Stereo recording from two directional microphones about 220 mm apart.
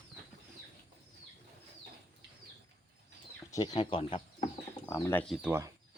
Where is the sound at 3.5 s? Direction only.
20° left (ahead or behind); by 5.7 s 10° right (ahead or behind).